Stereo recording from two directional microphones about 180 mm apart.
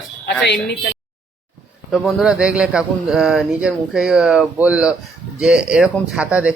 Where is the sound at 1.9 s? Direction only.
Centre (ahead or behind).